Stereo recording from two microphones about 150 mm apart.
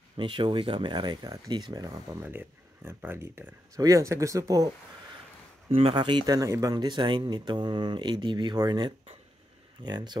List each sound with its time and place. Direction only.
0.2 s speech: 35° right (ahead or behind)
2.1 s speech: 15° right (ahead or behind)
5.7 s speech: 40° right (ahead or behind)